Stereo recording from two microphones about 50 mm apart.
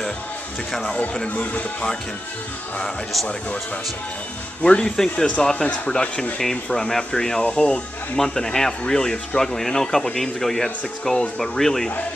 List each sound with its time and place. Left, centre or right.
1.3 s speech: left
3.3 s speech: left; by 11.9 s centre